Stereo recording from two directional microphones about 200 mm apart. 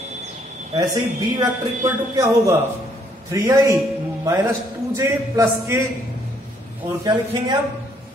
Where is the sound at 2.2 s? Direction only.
15° right (ahead or behind).